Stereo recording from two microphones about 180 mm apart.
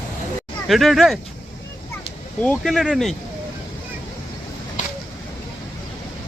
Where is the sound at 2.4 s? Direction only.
Centre (ahead or behind).